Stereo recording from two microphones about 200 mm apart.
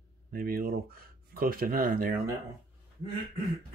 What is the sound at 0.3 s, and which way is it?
Speech, 45° right (ahead or behind).